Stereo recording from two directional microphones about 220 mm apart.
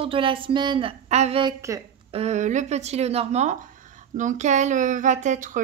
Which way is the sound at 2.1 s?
30° right (ahead or behind).